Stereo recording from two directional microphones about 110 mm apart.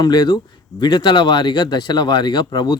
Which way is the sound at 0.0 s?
40° left (ahead or behind).